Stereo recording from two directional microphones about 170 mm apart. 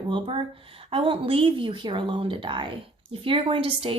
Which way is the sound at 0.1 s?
30° right (ahead or behind).